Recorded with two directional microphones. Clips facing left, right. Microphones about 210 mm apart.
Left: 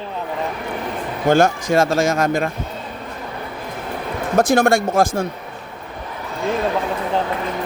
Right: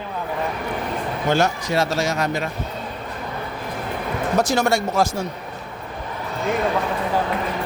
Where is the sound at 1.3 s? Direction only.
50° left (ahead or behind).